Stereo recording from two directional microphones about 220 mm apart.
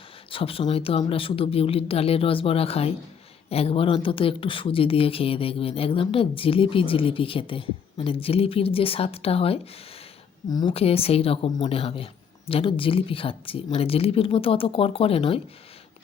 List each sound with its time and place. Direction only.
0.3 s speech: 25° left (ahead or behind)